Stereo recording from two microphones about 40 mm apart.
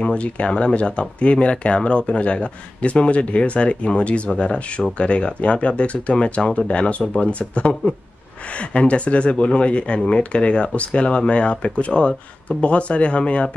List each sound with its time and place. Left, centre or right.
0.0 s speech: left
0.5 s speech: centre
0.7 s speech: left